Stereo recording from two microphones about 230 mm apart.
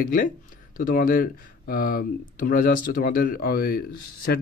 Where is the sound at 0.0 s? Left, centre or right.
Left.